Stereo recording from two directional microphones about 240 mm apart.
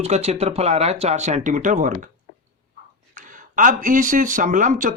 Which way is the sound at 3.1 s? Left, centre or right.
Right.